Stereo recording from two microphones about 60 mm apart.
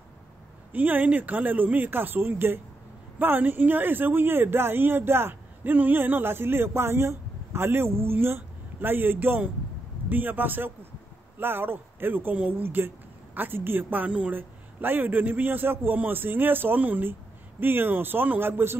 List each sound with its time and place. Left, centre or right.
0.7 s speech: right